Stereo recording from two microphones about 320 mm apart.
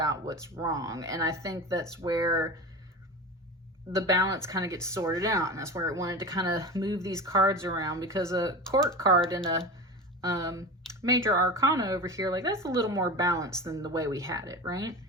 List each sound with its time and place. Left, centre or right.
0.0 s speech: centre
3.9 s speech: centre
10.2 s speech: centre